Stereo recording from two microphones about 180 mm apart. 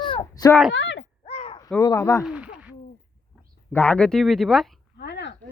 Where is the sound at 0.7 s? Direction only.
90° left.